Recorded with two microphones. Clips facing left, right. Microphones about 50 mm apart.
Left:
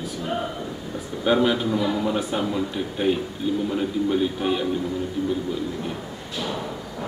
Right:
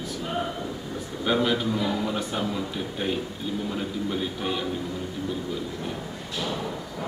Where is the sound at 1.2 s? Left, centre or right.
Centre.